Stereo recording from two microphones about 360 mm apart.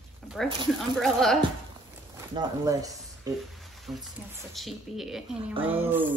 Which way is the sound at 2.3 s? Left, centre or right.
Centre.